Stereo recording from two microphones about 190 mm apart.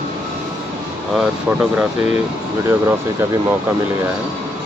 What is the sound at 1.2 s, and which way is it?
Speech, 10° right (ahead or behind).